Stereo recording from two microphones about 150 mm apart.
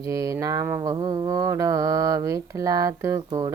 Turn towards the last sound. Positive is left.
turn(degrees=-20)  # may be behind; listen again after turning